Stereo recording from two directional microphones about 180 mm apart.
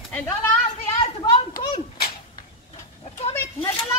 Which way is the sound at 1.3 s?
25° left (ahead or behind).